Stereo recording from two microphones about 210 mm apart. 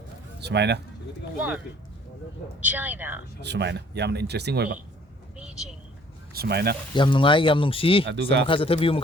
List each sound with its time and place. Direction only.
0.4 s speech: 55° right (ahead or behind)
1.4 s a woman's voice: 5° right (ahead or behind)
2.6 s a woman's voice: 10° right (ahead or behind)
3.4 s speech: 55° right (ahead or behind)
5.4 s vehicle: 5° right (ahead or behind)
6.3 s speech: 50° right (ahead or behind)
6.9 s speech: 25° left (ahead or behind)
8.0 s speech: 55° right (ahead or behind)
8.4 s speech: 25° left (ahead or behind)